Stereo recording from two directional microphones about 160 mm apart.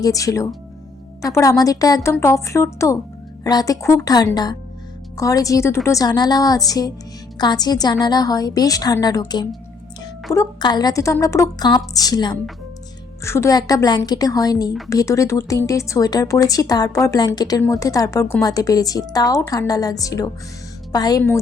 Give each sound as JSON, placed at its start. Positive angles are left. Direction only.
{"t": 0.0, "sound": "speech", "side_deg": 20}